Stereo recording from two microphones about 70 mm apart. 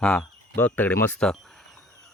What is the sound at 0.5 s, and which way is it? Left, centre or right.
Speech, left.